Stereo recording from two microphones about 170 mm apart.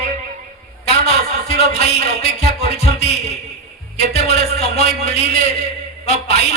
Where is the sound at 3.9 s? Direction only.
40° left (ahead or behind).